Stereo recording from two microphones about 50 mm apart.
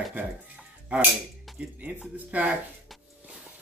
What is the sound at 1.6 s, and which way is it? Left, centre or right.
Speech, right.